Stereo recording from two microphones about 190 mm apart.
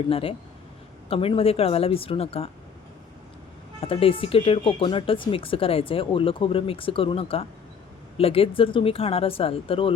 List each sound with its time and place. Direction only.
0.1 s a woman's voice: 30° left (ahead or behind)
3.8 s speech: 30° left (ahead or behind)